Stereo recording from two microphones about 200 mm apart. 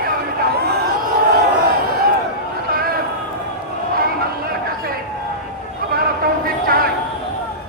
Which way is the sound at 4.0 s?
45° right (ahead or behind).